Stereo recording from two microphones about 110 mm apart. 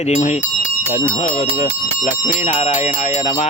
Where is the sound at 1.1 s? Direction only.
75° left (ahead or behind).